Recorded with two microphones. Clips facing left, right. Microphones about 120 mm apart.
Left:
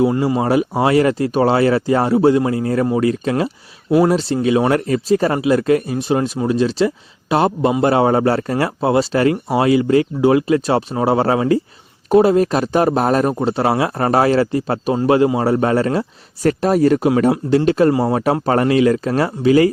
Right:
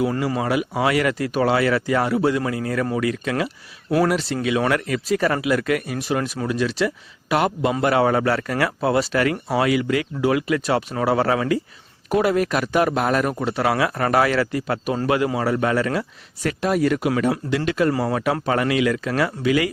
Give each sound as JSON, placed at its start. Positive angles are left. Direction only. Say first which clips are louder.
{"t": 0.0, "sound": "speech", "louder": "left 6 dB", "side_deg": 25}